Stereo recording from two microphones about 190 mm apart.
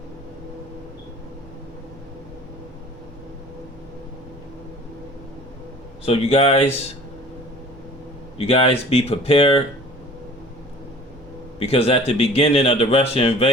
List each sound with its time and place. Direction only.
6.1 s speech: 30° left (ahead or behind)
8.4 s speech: 30° left (ahead or behind)
11.6 s speech: 30° left (ahead or behind)